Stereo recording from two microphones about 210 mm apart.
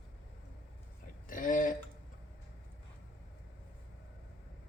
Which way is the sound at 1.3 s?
40° left (ahead or behind).